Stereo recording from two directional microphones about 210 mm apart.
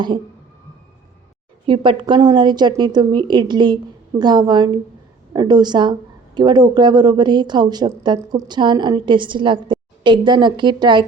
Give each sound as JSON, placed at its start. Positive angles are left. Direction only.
{"t": 1.6, "sound": "speech", "side_deg": -25}